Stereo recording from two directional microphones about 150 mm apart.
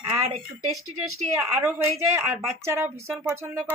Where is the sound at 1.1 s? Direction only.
20° right (ahead or behind).